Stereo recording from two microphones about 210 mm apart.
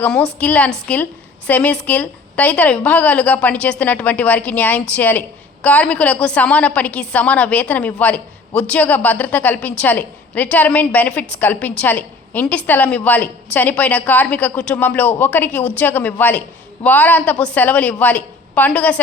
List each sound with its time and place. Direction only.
0.0 s a woman's voice: 5° left (ahead or behind)